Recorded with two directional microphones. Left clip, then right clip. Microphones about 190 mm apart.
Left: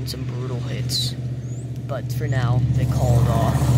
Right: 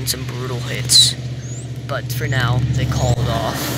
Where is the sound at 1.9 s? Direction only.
10° left (ahead or behind).